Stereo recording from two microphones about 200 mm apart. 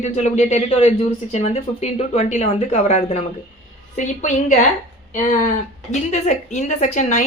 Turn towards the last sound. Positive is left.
turn(degrees=40)  # may be behind; listen again after turning